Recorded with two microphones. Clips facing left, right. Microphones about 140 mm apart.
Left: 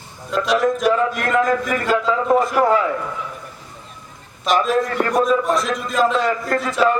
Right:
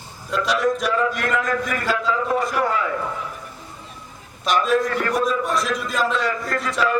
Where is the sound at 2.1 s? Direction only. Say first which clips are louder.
Left 5 dB; 35° left (ahead or behind).